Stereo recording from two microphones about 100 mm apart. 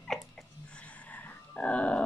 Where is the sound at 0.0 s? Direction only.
5° left (ahead or behind).